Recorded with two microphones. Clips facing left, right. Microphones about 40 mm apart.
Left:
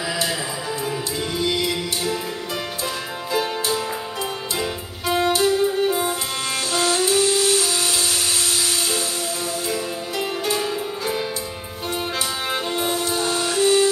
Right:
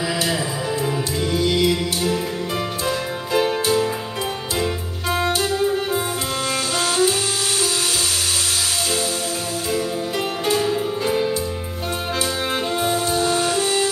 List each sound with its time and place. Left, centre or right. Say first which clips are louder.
3.3 s music: right 4 dB; centre
6.7 s music: left 1 dB; right
9.8 s music: right 3 dB; centre
13.6 s music: left 3 dB; centre